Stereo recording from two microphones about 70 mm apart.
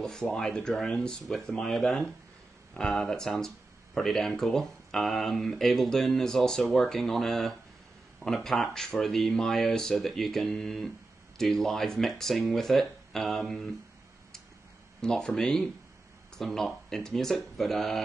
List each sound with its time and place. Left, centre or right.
0.0 s speech: centre
15.0 s speech: centre